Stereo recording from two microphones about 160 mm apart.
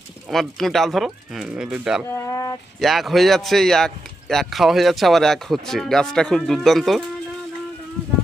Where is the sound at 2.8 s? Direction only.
Centre (ahead or behind).